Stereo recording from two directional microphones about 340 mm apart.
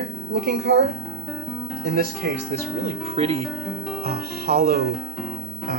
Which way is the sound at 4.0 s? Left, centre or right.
Right.